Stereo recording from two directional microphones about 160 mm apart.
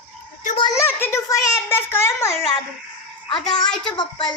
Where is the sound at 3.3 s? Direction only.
30° left (ahead or behind).